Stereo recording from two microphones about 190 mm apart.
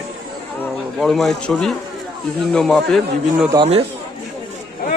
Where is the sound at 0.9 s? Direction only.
Centre (ahead or behind).